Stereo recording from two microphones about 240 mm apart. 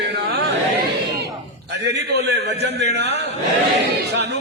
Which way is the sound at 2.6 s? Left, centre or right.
Right.